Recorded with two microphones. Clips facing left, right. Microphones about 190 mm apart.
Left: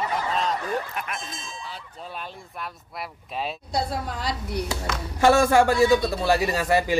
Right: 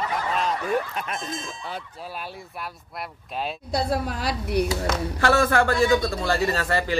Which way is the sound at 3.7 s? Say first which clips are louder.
Right 4 dB; 70° right (ahead or behind).